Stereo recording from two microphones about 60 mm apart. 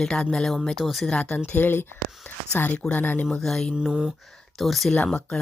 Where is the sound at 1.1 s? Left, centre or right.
Centre.